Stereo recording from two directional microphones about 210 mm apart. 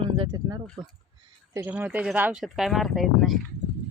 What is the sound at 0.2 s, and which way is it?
Speech, 20° right (ahead or behind).